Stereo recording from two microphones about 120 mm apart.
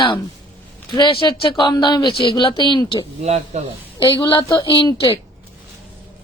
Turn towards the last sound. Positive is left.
turn(degrees=40)  # may be behind; listen again after turning